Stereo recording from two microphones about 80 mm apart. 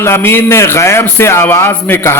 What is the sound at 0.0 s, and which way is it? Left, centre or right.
A man's voice, left.